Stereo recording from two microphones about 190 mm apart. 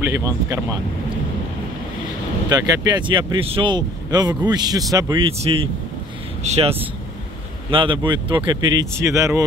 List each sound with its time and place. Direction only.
0.0 s speech: 15° right (ahead or behind)
2.5 s speech: 20° right (ahead or behind)